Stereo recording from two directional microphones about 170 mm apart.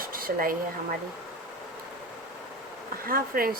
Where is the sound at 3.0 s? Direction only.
60° right (ahead or behind).